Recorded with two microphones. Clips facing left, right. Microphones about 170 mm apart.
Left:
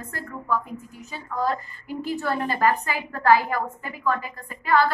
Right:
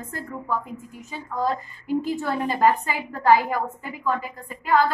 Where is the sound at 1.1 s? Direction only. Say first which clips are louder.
Even; 20° right (ahead or behind).